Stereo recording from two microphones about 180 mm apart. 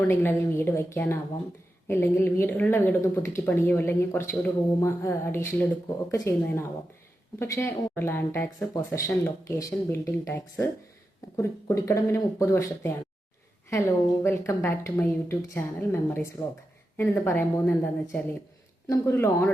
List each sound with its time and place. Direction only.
0.0 s a woman's voice: 10° left (ahead or behind)